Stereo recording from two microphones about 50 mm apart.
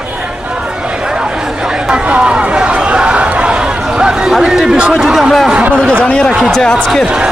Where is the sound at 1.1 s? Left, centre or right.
Centre.